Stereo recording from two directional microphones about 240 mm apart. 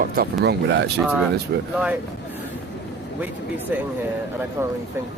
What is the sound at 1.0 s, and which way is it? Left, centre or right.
Speech, centre.